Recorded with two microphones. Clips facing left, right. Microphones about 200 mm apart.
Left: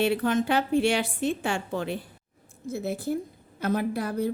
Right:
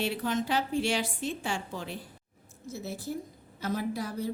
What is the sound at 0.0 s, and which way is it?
A woman's voice, 60° left (ahead or behind).